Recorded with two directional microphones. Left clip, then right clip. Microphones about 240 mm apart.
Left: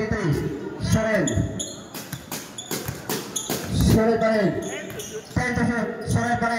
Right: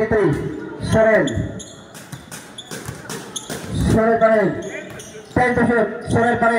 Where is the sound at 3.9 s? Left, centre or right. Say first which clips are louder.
Right 6 dB; right.